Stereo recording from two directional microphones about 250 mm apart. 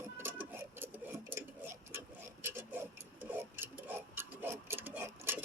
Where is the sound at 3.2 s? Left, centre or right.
Centre.